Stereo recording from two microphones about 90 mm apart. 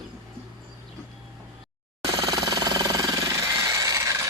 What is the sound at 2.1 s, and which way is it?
Jackhammer, 40° right (ahead or behind).